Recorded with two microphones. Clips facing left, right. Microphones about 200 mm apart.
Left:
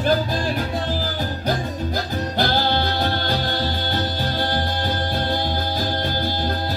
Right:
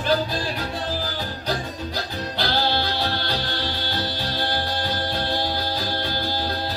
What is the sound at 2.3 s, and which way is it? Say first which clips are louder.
Music: left 3 dB; 50° left (ahead or behind).